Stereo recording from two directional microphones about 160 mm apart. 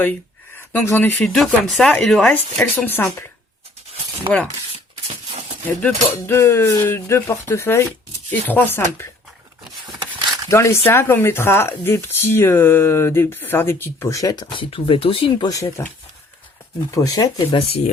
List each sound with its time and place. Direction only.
0.7 s speech: 15° left (ahead or behind)
1.3 s speech: centre (ahead or behind)
5.6 s speech: 10° left (ahead or behind)
10.2 s a sound: 25° right (ahead or behind)
10.5 s speech: 15° left (ahead or behind)
14.7 s speech: 35° left (ahead or behind)
16.9 s speech: 20° left (ahead or behind)
17.6 s speech: 40° left (ahead or behind)